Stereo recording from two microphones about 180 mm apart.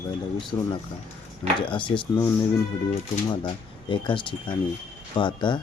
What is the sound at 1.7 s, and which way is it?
Speech, 25° left (ahead or behind).